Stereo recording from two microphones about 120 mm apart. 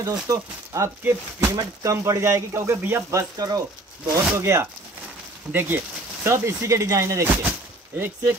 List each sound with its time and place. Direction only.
0.0 s speech: 30° right (ahead or behind)